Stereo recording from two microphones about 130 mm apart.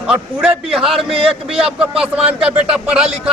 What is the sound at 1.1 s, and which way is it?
Speech, 45° right (ahead or behind).